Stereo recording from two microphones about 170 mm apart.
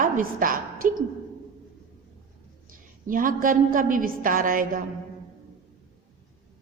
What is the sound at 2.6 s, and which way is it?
A woman's voice, 55° right (ahead or behind).